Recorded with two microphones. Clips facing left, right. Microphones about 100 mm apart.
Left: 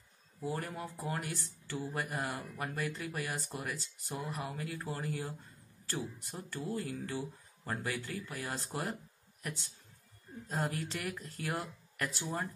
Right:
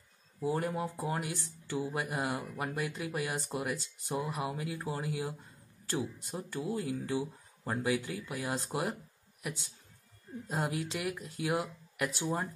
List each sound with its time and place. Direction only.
0.4 s speech: 20° right (ahead or behind)